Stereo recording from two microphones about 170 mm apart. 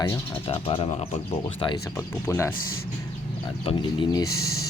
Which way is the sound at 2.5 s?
60° left (ahead or behind).